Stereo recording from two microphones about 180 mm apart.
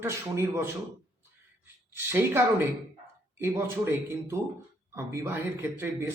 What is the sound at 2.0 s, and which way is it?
Speech, 15° right (ahead or behind).